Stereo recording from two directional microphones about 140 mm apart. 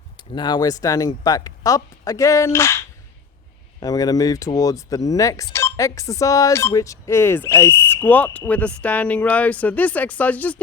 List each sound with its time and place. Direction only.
0.2 s speech: 30° left (ahead or behind); by 10.6 s 10° left (ahead or behind)